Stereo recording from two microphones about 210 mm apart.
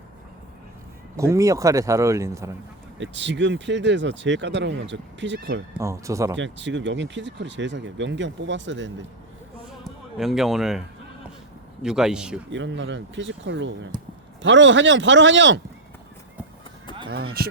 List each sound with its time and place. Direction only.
1.1 s speech: 15° right (ahead or behind)
3.0 s speech: 60° right (ahead or behind)
5.8 s speech: 15° right (ahead or behind)
6.3 s speech: 60° right (ahead or behind)
9.8 s a man's voice: centre (ahead or behind)
12.5 s speech: 60° right (ahead or behind)